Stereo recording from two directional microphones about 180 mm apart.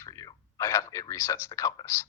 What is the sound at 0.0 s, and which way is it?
Speech, 20° left (ahead or behind).